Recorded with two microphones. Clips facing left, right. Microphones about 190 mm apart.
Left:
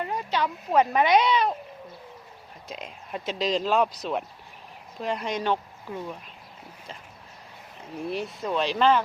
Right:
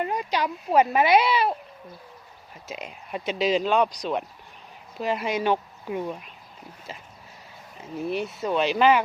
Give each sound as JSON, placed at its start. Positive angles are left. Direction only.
{"t": 0.2, "sound": "speech", "side_deg": -10}
{"t": 2.6, "sound": "speech", "side_deg": -5}
{"t": 8.1, "sound": "speech", "side_deg": 0}